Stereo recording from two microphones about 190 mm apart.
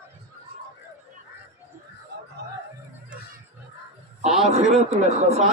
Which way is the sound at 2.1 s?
60° right (ahead or behind).